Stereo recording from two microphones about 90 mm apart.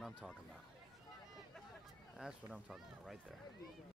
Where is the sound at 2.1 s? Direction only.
5° right (ahead or behind).